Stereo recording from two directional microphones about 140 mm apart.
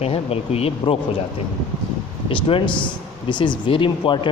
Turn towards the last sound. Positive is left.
turn(degrees=35)  # may be behind; listen again after turning